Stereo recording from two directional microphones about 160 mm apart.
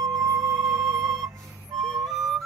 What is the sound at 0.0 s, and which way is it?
Music, 20° right (ahead or behind).